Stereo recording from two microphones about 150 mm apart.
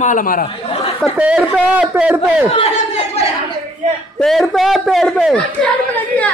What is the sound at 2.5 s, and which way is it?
Speech, 40° left (ahead or behind).